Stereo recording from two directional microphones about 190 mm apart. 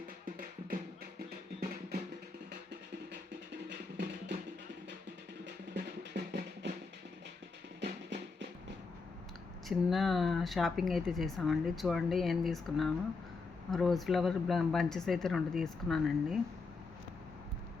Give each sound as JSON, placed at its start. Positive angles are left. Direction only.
{"t": 0.3, "sound": "music", "side_deg": -50}
{"t": 3.1, "sound": "music", "side_deg": -65}
{"t": 5.5, "sound": "music", "side_deg": -65}
{"t": 7.8, "sound": "music", "side_deg": -65}
{"t": 9.6, "sound": "speech", "side_deg": 0}